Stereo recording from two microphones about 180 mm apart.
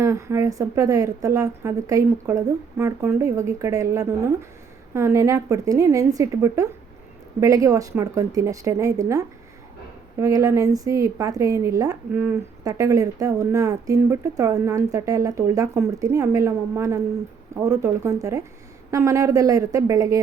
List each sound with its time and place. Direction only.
0.0 s a woman's voice: 15° right (ahead or behind)